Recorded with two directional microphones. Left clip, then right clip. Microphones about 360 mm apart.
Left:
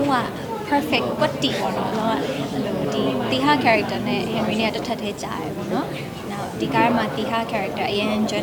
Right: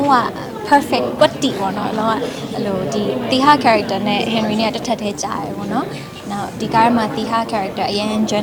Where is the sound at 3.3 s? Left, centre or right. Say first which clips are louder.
Right 7 dB; right.